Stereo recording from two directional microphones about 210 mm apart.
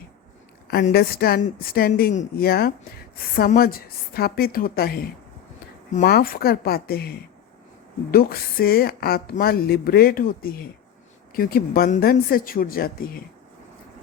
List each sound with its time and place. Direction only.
0.7 s a woman's voice: 45° left (ahead or behind)